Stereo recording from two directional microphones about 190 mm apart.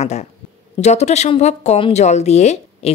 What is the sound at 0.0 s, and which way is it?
Speech, 35° left (ahead or behind).